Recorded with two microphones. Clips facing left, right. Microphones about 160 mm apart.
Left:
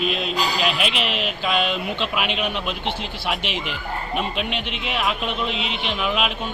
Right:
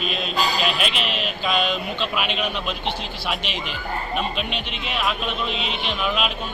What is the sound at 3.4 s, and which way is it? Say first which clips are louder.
Speech: left 2 dB; 65° left (ahead or behind).